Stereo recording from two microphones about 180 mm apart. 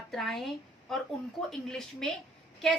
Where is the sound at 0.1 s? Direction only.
Centre (ahead or behind).